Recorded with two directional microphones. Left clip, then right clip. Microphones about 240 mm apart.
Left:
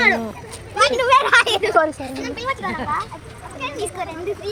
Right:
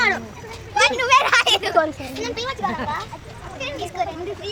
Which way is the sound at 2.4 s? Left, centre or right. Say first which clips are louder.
Left 5 dB; right.